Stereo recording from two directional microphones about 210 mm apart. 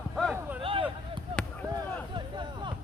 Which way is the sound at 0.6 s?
25° right (ahead or behind).